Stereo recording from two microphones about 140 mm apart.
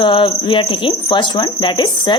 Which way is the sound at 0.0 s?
35° left (ahead or behind).